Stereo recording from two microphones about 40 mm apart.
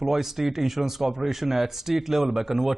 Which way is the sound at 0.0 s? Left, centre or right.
Centre.